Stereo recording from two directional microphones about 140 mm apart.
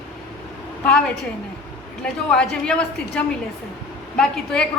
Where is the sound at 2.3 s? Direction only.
5° left (ahead or behind).